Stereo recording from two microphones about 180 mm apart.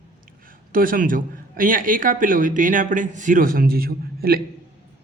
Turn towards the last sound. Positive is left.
turn(degrees=-55)  # may be behind; listen again after turning